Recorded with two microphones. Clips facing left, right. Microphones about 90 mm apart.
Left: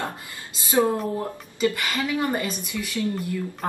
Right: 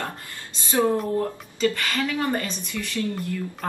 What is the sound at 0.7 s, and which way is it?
Speech, 15° left (ahead or behind).